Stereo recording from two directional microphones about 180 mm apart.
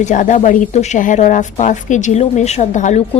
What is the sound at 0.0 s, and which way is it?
A woman's voice, 45° left (ahead or behind).